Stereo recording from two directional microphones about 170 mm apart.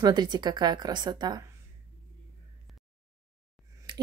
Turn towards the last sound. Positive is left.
turn(degrees=-30)  # may be behind; listen again after turning